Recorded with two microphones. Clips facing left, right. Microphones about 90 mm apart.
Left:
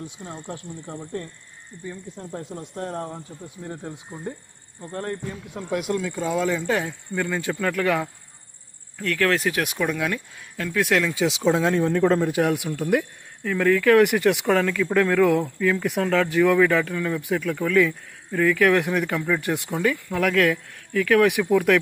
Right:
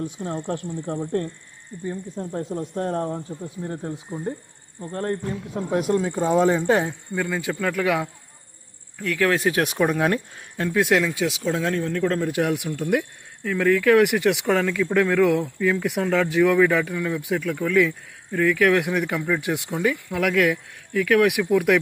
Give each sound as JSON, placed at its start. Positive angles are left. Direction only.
{"t": 0.2, "sound": "speech", "side_deg": -50}
{"t": 1.8, "sound": "speech", "side_deg": -30}
{"t": 7.1, "sound": "speech", "side_deg": -5}
{"t": 10.6, "sound": "speech", "side_deg": -20}
{"t": 11.0, "sound": "speech", "side_deg": 0}
{"t": 11.5, "sound": "speech", "side_deg": 10}
{"t": 16.8, "sound": "speech", "side_deg": -10}
{"t": 17.1, "sound": "speech", "side_deg": 0}